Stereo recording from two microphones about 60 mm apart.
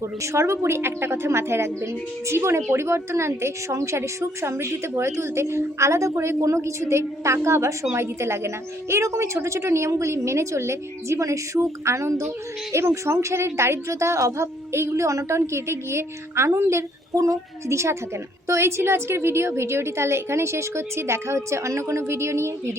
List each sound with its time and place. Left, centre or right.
0.2 s a woman's voice: right